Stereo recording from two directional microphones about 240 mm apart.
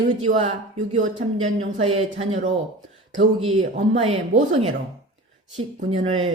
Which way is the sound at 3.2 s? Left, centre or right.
Right.